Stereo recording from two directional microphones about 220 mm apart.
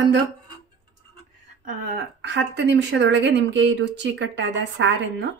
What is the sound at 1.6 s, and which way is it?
Speech, 50° right (ahead or behind).